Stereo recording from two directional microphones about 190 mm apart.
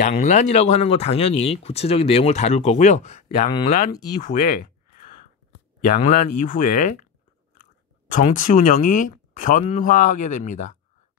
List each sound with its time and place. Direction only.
0.0 s speech: 40° left (ahead or behind)
4.2 s a sound: 45° left (ahead or behind)
5.9 s speech: 40° left (ahead or behind)
8.1 s speech: 45° left (ahead or behind)